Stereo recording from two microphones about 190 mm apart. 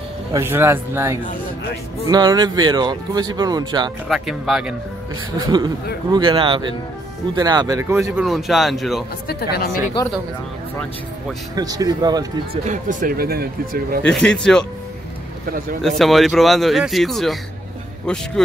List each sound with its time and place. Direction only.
0.3 s a man's voice: 10° right (ahead or behind)
4.1 s speech: centre (ahead or behind)
6.1 s speech: 25° right (ahead or behind); by 9.0 s centre (ahead or behind)
9.3 s speech: 55° left (ahead or behind)
11.5 s speech: 20° right (ahead or behind)
12.6 s speech: 45° right (ahead or behind)
14.0 s speech: 5° left (ahead or behind)
16.0 s speech: centre (ahead or behind)